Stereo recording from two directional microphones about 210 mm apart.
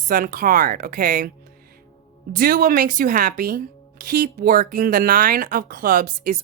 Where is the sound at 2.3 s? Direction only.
40° right (ahead or behind).